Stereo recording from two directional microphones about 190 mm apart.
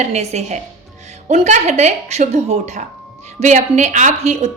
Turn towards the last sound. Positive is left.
turn(degrees=-35)  # may be behind; listen again after turning